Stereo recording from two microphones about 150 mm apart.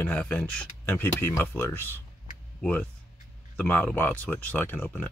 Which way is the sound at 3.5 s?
10° left (ahead or behind).